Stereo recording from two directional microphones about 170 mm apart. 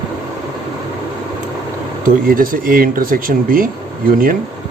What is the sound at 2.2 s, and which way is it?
Speech, 55° right (ahead or behind).